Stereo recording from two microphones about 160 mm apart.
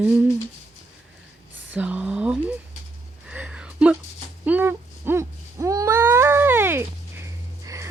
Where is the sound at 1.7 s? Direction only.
10° right (ahead or behind).